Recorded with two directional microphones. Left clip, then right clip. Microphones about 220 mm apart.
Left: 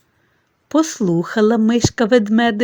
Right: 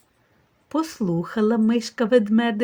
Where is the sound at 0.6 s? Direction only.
35° left (ahead or behind).